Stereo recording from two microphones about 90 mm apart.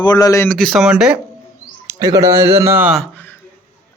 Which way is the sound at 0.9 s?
10° right (ahead or behind).